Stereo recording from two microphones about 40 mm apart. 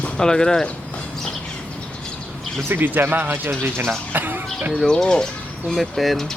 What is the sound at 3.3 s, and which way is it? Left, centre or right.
Speech, right.